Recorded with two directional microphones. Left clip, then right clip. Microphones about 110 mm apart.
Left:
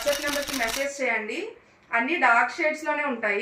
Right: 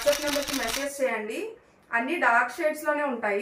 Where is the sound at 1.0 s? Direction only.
20° right (ahead or behind).